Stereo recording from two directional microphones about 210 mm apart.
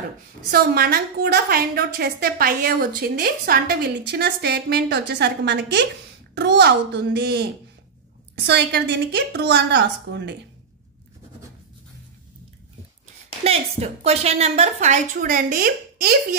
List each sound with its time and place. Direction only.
0.5 s a woman's voice: 45° right (ahead or behind)
8.5 s a woman's voice: 55° right (ahead or behind)
13.4 s a woman's voice: 30° right (ahead or behind); by 16.3 s 45° right (ahead or behind)